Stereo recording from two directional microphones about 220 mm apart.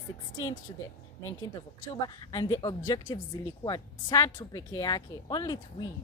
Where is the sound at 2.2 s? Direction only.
20° left (ahead or behind).